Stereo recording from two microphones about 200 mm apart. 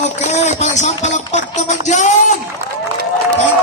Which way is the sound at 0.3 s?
35° left (ahead or behind).